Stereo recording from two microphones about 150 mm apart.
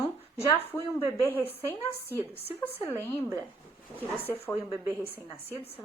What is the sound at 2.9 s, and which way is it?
Speech, 15° left (ahead or behind).